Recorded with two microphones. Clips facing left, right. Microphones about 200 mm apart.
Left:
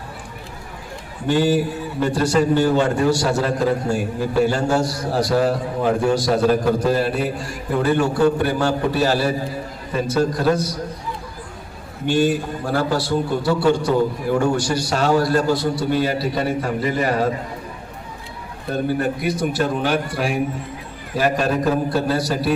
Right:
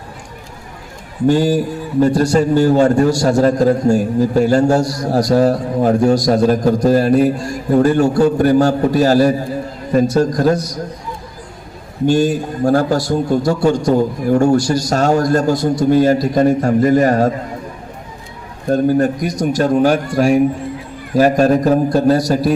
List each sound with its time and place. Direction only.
1.3 s a man's voice: 40° right (ahead or behind)
12.0 s a man's voice: 40° right (ahead or behind)
18.7 s a man's voice: 40° right (ahead or behind)